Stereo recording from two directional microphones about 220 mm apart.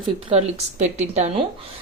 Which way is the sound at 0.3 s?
30° right (ahead or behind).